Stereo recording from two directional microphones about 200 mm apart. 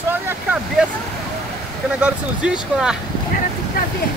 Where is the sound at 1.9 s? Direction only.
5° right (ahead or behind).